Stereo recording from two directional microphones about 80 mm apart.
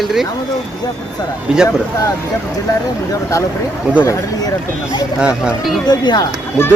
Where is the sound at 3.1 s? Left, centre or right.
Left.